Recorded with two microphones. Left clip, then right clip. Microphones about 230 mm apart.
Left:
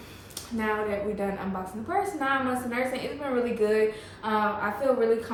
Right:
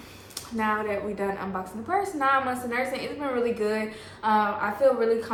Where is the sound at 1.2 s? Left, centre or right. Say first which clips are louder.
Right 2 dB; right.